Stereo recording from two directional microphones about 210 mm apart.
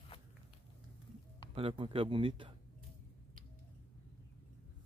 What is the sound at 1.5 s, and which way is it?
Speech, 25° right (ahead or behind).